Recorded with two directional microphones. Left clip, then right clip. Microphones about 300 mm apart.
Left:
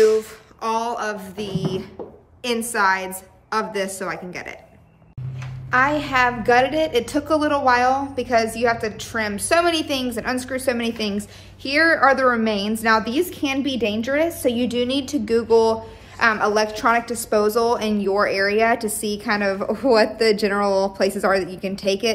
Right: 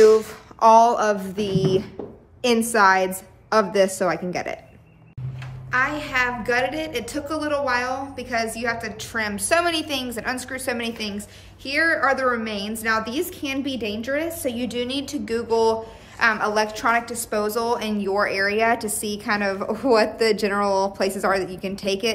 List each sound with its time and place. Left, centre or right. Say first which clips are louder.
0.0 s a sound: right 2 dB; centre
2.4 s a woman's voice: right 3 dB; centre
5.7 s a woman's voice: left 4 dB; centre